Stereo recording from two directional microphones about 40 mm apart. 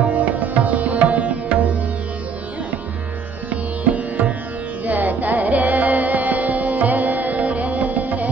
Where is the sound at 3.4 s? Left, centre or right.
Right.